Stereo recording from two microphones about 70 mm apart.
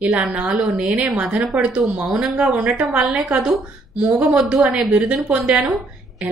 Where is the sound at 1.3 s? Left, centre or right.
Right.